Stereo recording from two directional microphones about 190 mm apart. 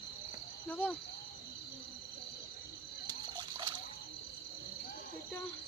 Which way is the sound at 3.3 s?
25° right (ahead or behind).